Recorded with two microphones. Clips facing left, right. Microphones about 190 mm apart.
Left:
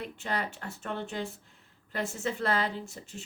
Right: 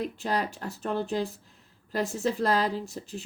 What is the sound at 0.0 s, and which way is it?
Speech, 35° right (ahead or behind).